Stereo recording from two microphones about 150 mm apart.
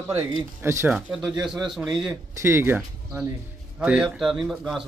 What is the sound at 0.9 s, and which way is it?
Speech, 5° right (ahead or behind).